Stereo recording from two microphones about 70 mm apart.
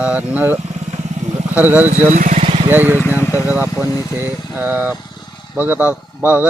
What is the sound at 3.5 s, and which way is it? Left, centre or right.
Speech, right.